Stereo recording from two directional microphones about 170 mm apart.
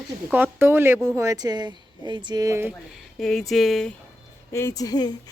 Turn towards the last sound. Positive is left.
turn(degrees=25)  # may be behind; listen again after turning